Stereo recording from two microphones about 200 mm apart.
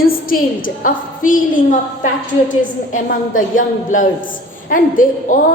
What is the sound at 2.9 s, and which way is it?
A woman's voice, 45° left (ahead or behind).